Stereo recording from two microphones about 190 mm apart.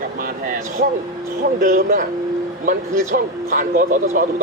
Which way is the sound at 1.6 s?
45° right (ahead or behind).